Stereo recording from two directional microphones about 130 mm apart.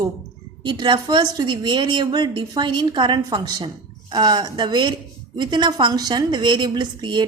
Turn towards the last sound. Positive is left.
turn(degrees=-35)  # may be behind; listen again after turning